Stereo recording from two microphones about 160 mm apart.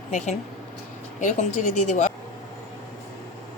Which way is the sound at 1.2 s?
50° left (ahead or behind).